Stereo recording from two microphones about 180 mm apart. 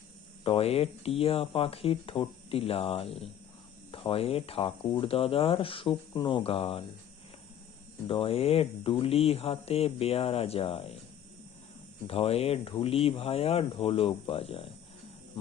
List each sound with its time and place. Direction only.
0.4 s speech: 35° left (ahead or behind)
8.0 s speech: 30° left (ahead or behind)
12.0 s speech: 30° left (ahead or behind)